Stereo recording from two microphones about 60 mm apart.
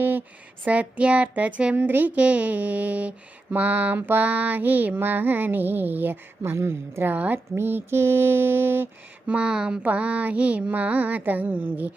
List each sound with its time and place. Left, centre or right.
0.6 s speech: right
3.9 s female singing: right
6.4 s female singing: right
9.2 s speech: right